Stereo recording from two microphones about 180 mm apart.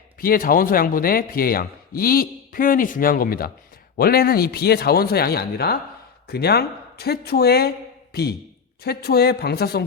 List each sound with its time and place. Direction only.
0.2 s speech: 50° left (ahead or behind)